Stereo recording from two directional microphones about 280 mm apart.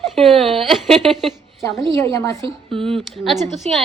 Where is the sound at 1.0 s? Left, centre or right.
Centre.